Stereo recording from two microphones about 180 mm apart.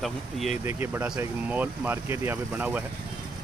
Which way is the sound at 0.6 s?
10° right (ahead or behind).